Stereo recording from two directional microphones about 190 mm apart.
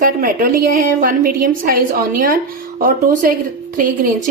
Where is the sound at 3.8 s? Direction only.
45° right (ahead or behind).